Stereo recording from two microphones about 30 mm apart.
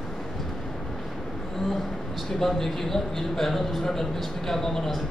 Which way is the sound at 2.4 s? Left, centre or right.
Centre.